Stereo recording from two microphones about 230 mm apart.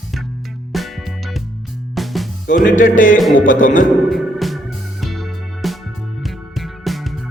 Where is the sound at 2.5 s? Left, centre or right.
Left.